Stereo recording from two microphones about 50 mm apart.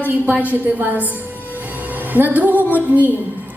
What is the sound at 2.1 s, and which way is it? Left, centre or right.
A woman's voice, right.